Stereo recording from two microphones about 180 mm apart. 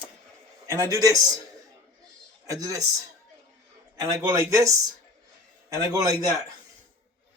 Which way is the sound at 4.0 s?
20° right (ahead or behind).